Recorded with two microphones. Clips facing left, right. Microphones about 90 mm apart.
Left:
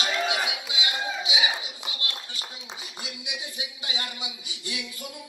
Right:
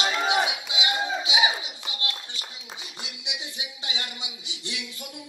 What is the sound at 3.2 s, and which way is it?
Speech, 25° right (ahead or behind).